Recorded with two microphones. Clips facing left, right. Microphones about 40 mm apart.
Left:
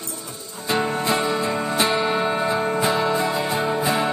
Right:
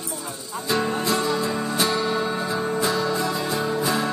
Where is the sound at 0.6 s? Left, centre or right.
Left.